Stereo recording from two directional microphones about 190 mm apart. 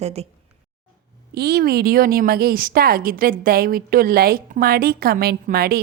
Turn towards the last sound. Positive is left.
turn(degrees=-55)  # may be behind; listen again after turning